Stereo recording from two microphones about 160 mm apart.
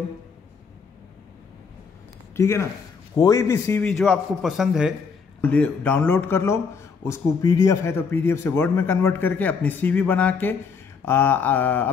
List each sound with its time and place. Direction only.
2.3 s a man's voice: 15° left (ahead or behind)
3.8 s a man's voice: 5° left (ahead or behind)
5.4 s a man's voice: 10° left (ahead or behind)